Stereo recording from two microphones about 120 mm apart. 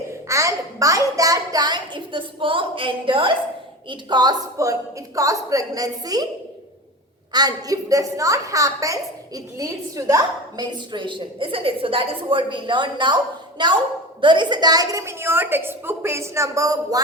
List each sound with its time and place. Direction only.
0.1 s a woman's voice: 25° right (ahead or behind)
7.3 s a woman's voice: 30° right (ahead or behind)